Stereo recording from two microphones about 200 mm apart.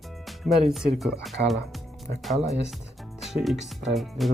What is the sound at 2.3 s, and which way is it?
Speech, 35° right (ahead or behind).